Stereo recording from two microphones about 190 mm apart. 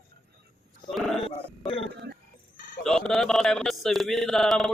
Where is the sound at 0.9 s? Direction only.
Centre (ahead or behind).